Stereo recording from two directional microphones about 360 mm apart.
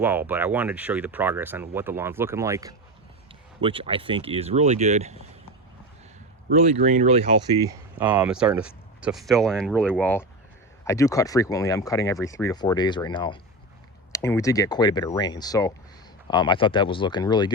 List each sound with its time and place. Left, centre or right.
0.0 s speech: centre
6.5 s speech: centre
7.7 s speech: centre